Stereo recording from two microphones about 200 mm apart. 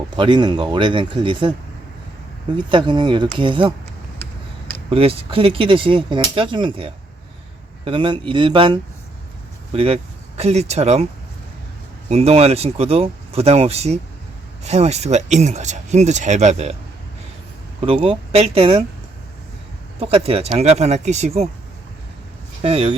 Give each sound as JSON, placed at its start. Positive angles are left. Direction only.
{"t": 0.2, "sound": "speech", "side_deg": -20}
{"t": 2.6, "sound": "speech", "side_deg": -25}
{"t": 4.9, "sound": "speech", "side_deg": -30}
{"t": 12.0, "sound": "speech", "side_deg": -30}
{"t": 17.7, "sound": "speech", "side_deg": -25}
{"t": 20.0, "sound": "speech", "side_deg": -30}
{"t": 22.6, "sound": "speech", "side_deg": -30}